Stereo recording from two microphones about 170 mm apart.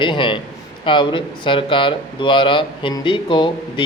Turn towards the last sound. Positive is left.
turn(degrees=30)  # may be behind; listen again after turning